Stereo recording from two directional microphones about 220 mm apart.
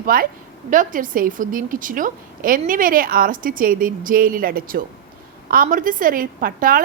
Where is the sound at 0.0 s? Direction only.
40° right (ahead or behind).